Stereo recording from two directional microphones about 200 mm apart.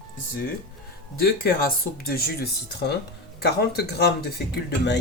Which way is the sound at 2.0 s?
50° left (ahead or behind).